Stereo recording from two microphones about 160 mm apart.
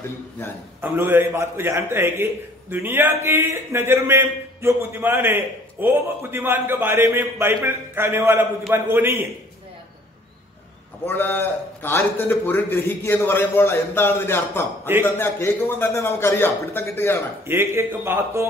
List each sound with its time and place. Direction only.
0.7 s a man's voice: 15° right (ahead or behind)
11.1 s a man's voice: 15° left (ahead or behind)
17.5 s a man's voice: 15° right (ahead or behind)